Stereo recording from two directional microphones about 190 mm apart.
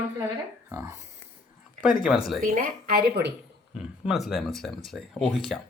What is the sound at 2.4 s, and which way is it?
Speech, 45° right (ahead or behind).